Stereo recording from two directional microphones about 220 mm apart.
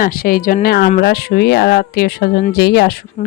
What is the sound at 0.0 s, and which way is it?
A woman's voice, 40° left (ahead or behind).